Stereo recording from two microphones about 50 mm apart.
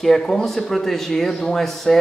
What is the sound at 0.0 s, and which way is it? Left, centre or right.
Speech, centre.